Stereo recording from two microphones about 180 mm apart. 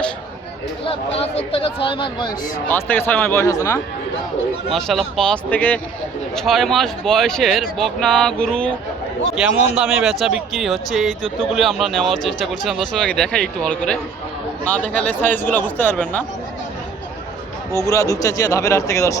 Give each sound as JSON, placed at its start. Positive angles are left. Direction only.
{"t": 0.9, "sound": "speech", "side_deg": 35}
{"t": 2.6, "sound": "speech", "side_deg": 10}
{"t": 4.7, "sound": "speech", "side_deg": 0}
{"t": 17.8, "sound": "speech", "side_deg": 15}